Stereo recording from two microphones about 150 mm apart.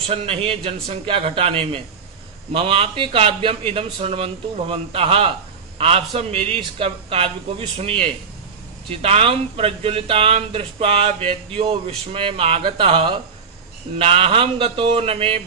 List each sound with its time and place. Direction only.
0.1 s speech: 40° right (ahead or behind)